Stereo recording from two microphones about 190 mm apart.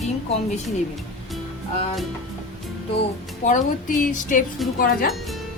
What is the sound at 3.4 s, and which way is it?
A woman's voice, 40° left (ahead or behind).